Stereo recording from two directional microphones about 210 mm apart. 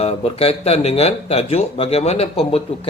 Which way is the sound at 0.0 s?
30° left (ahead or behind).